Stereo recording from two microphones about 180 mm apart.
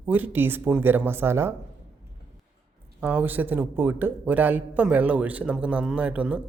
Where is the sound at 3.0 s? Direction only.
10° right (ahead or behind).